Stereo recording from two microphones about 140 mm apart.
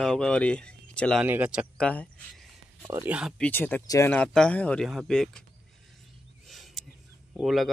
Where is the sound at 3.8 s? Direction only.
25° left (ahead or behind).